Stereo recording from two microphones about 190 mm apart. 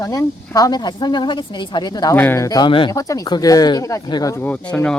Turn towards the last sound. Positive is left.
turn(degrees=5)  # may be behind; listen again after turning